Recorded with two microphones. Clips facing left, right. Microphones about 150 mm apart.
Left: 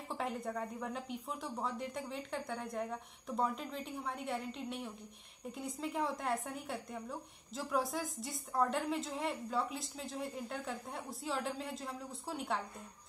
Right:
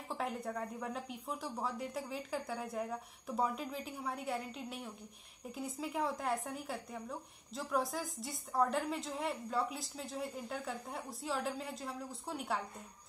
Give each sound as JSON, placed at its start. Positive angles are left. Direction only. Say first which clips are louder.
{"t": 0.1, "sound": "a woman's voice", "louder": "even", "side_deg": 0}